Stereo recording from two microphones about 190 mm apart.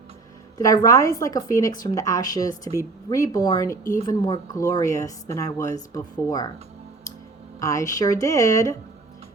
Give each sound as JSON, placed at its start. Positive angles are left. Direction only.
{"t": 0.6, "sound": "speech", "side_deg": 15}
{"t": 7.6, "sound": "speech", "side_deg": 15}